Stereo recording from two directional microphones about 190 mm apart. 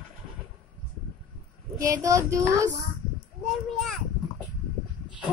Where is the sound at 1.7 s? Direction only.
15° right (ahead or behind).